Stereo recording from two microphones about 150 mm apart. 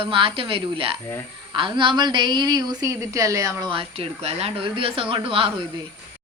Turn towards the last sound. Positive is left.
turn(degrees=-35)  # may be behind; listen again after turning